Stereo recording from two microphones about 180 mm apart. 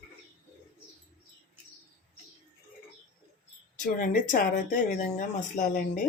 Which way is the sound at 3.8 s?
45° left (ahead or behind).